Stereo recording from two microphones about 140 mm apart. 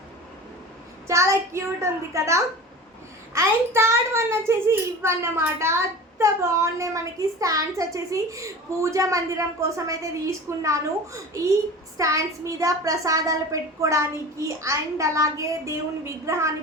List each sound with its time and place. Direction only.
1.0 s a child's voice: 20° right (ahead or behind)